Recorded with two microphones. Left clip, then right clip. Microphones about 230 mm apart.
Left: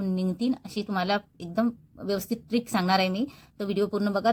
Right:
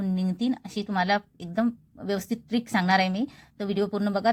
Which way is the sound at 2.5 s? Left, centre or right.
Centre.